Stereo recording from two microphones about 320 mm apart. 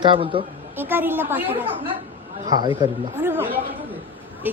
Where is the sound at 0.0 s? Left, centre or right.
Centre.